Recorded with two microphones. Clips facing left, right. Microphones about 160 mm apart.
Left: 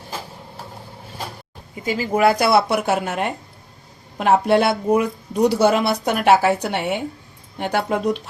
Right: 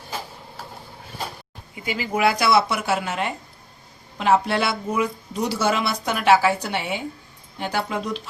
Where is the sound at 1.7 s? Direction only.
40° left (ahead or behind).